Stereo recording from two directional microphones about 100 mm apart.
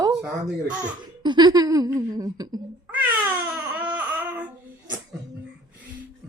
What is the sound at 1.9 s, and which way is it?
Speech, 35° right (ahead or behind).